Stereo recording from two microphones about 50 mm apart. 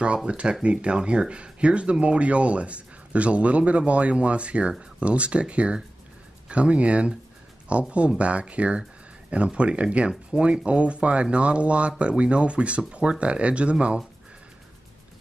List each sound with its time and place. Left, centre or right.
0.0 s speech: right